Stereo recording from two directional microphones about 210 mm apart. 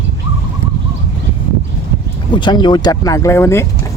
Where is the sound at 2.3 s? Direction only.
20° left (ahead or behind).